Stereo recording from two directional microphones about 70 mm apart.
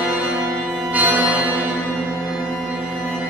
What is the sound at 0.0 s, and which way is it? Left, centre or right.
Music, centre.